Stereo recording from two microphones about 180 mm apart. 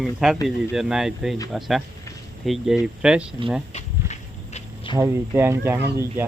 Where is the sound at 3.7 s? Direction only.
40° left (ahead or behind).